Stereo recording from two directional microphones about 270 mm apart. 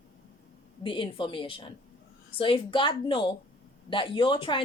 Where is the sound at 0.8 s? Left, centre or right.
Centre.